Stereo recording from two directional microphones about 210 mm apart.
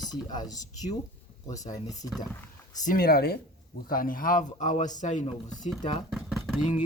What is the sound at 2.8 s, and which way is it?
Speech, 45° left (ahead or behind).